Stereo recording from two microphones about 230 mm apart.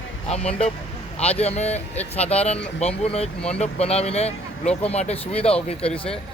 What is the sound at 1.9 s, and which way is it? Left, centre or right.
Speech, centre.